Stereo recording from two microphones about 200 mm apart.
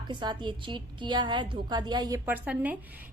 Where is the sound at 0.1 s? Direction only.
25° right (ahead or behind).